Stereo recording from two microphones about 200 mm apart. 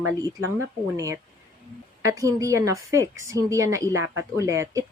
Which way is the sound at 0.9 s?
15° right (ahead or behind).